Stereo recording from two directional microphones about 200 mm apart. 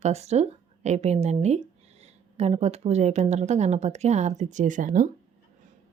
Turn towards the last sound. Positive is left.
turn(degrees=-40)  # may be behind; listen again after turning